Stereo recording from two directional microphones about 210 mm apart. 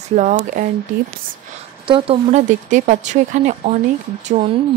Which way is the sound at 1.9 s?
30° right (ahead or behind).